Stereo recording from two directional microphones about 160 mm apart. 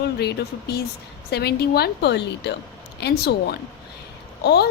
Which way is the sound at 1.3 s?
90° left.